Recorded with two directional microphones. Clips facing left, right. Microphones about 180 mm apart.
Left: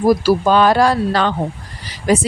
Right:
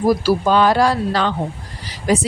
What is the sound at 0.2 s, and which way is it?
A woman's voice, 55° left (ahead or behind).